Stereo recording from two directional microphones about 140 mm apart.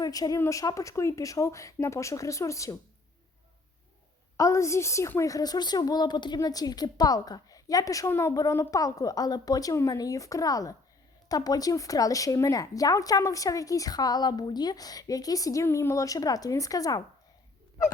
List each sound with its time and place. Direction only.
0.0 s a woman's voice: 25° left (ahead or behind)
4.4 s a woman's voice: 20° left (ahead or behind)